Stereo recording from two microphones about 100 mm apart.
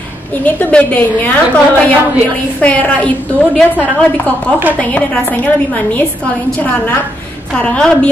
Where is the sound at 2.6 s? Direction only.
15° left (ahead or behind).